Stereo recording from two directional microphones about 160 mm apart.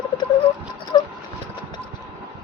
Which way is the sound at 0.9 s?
25° left (ahead or behind).